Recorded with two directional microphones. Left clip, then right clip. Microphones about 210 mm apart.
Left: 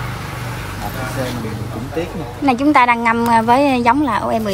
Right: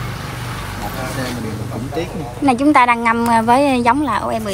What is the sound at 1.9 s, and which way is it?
Speech, 5° left (ahead or behind).